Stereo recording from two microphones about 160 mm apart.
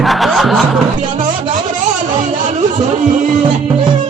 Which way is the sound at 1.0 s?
55° right (ahead or behind).